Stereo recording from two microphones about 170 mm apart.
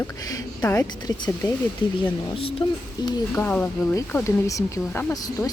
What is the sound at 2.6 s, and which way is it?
Speech, 30° left (ahead or behind).